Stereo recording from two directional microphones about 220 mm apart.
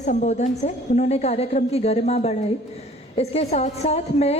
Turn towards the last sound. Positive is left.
turn(degrees=30)  # may be behind; listen again after turning